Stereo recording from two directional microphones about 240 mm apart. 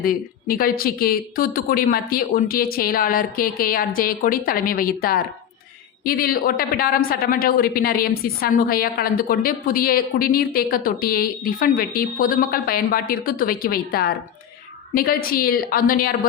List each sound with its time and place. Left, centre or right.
0.0 s a woman's voice: left